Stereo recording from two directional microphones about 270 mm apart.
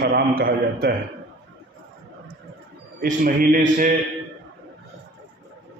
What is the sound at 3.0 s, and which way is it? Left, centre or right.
Speech, right.